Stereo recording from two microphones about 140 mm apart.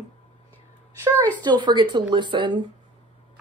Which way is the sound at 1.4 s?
30° right (ahead or behind).